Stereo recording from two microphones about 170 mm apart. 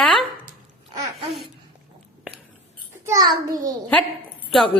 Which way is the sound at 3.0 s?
20° right (ahead or behind).